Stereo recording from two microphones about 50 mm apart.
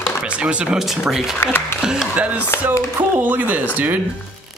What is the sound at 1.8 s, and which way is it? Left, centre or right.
Speech, centre.